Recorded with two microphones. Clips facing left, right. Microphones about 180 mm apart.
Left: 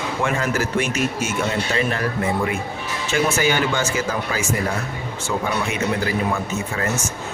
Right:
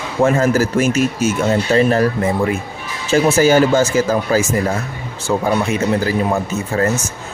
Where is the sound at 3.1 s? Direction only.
40° right (ahead or behind).